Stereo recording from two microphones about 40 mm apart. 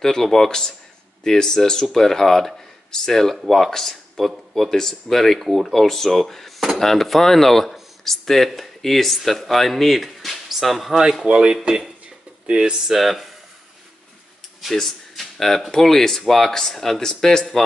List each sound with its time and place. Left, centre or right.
0.0 s speech: centre
11.2 s speech: right
12.7 s speech: centre
14.6 s speech: centre